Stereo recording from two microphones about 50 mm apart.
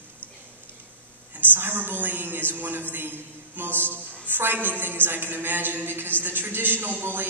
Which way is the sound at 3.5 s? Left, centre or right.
Right.